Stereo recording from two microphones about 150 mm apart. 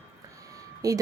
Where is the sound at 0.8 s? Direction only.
25° right (ahead or behind).